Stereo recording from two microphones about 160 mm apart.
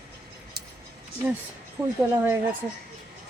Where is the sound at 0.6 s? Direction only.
80° right.